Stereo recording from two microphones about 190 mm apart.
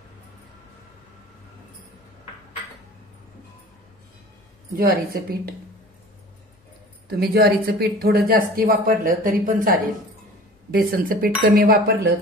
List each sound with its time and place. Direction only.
4.7 s a woman's voice: 50° right (ahead or behind)
7.1 s a woman's voice: 55° right (ahead or behind)